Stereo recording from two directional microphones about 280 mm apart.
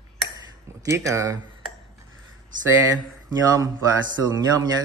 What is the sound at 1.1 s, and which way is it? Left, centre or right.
Speech, centre.